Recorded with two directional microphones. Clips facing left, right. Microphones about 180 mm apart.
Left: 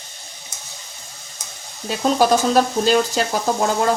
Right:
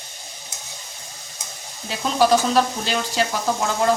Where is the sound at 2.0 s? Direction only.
45° left (ahead or behind).